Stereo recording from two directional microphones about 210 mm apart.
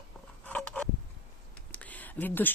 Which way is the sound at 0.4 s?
5° left (ahead or behind).